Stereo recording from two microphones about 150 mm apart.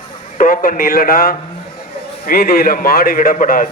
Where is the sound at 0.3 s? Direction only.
60° left (ahead or behind).